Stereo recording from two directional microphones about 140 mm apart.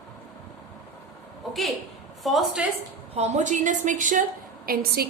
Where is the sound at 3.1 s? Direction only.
50° right (ahead or behind).